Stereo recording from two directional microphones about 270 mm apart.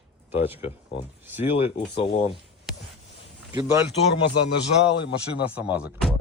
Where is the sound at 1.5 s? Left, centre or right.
Left.